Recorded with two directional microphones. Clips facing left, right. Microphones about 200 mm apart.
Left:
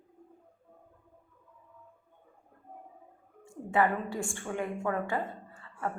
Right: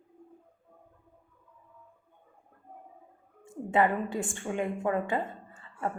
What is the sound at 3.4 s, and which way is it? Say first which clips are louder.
A woman's voice: right 2 dB; 20° right (ahead or behind).